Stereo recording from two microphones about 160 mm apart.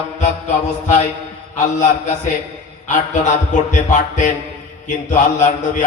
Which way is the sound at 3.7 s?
50° left (ahead or behind).